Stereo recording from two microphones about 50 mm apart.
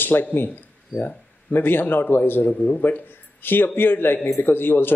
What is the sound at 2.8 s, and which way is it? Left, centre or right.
A man's voice, left.